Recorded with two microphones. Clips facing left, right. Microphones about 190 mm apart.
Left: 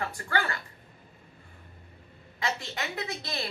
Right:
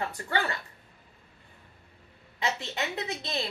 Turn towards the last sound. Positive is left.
turn(degrees=-20)  # may be behind; listen again after turning